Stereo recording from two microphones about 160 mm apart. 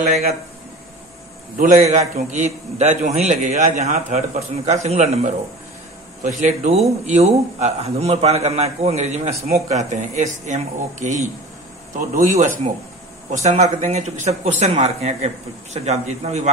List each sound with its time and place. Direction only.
1.6 s speech: 50° right (ahead or behind)